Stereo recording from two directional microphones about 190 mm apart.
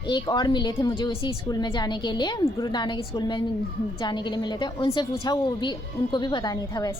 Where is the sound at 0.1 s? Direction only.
25° left (ahead or behind).